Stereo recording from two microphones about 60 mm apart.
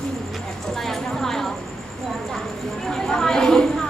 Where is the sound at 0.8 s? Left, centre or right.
Centre.